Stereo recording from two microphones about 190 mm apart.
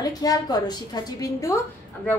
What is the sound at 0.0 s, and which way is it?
A woman's voice, 20° left (ahead or behind).